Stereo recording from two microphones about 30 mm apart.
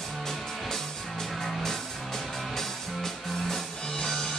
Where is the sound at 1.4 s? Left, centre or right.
Centre.